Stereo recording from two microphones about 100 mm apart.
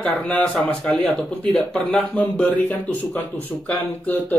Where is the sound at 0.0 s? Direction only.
10° left (ahead or behind).